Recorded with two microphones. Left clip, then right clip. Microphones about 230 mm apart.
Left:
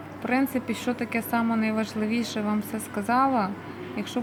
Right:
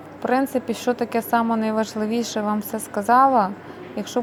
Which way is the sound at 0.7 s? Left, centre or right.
Centre.